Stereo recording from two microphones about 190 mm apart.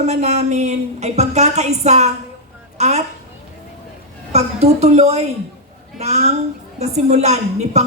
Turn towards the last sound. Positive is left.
turn(degrees=-35)  # may be behind; listen again after turning